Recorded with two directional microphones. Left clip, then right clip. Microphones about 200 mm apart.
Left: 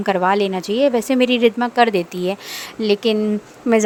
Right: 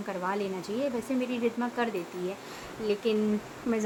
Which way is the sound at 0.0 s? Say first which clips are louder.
Left 15 dB; 55° left (ahead or behind).